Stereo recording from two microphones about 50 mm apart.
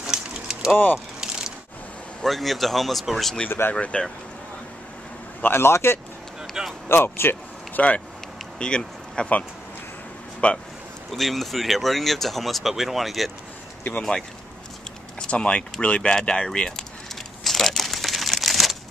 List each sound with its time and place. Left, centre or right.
0.0 s a sound: centre
2.2 s speech: centre
3.4 s speech: left
3.9 s speech: left
5.4 s speech: left
7.7 s speech: left
8.5 s speech: centre
10.4 s speech: left
11.1 s speech: centre
15.1 s speech: centre
17.1 s crumpling: centre
18.4 s a sound: centre